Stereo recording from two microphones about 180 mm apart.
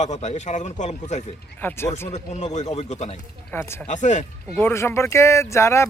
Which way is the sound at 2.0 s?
40° left (ahead or behind).